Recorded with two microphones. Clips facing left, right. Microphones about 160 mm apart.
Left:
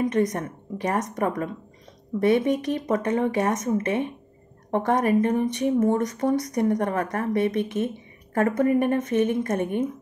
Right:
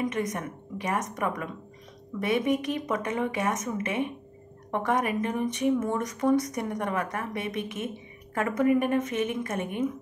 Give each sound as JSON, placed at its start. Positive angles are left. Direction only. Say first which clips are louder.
{"t": 0.0, "sound": "speech", "louder": "left 6 dB", "side_deg": 35}